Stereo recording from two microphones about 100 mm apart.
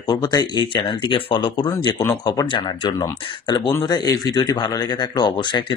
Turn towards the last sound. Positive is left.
turn(degrees=50)  # may be behind; listen again after turning